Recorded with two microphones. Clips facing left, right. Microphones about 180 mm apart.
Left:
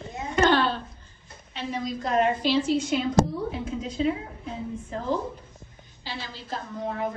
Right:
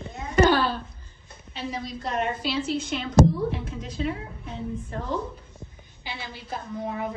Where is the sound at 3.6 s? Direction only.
Centre (ahead or behind).